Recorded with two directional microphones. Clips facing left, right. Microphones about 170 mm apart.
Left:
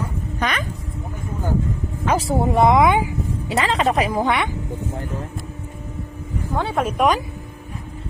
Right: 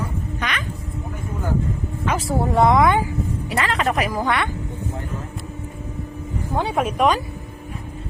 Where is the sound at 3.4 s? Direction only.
25° left (ahead or behind).